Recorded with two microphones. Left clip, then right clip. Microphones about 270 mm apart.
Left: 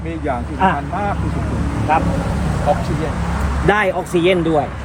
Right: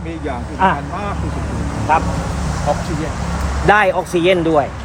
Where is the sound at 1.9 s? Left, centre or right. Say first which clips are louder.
Right 1 dB; centre.